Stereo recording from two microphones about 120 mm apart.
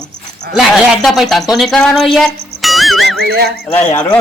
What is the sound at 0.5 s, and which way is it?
Speech, centre (ahead or behind).